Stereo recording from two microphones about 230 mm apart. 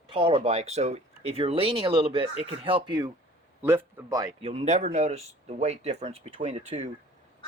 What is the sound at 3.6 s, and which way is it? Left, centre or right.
Speech, centre.